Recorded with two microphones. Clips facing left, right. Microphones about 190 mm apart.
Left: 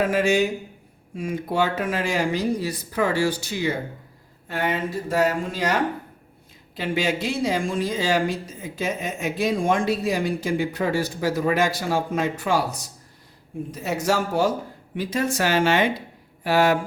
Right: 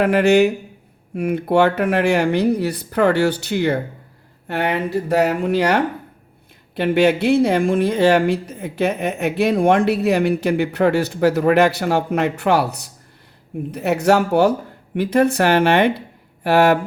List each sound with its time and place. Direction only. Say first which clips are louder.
0.0 s speech: right 6 dB; 65° right (ahead or behind)